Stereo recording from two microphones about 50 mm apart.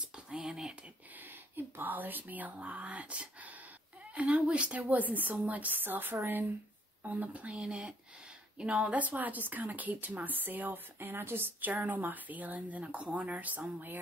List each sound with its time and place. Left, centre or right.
0.3 s speech: centre
1.5 s speech: right
4.8 s speech: right
7.0 s speech: right
11.6 s speech: right